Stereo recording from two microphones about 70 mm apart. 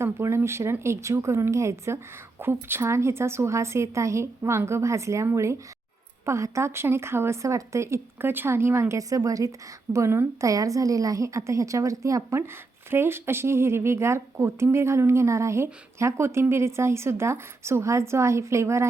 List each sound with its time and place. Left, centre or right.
0.0 s speech: right
2.4 s a woman's voice: right
9.9 s speech: right
10.4 s a woman's voice: right
12.9 s speech: right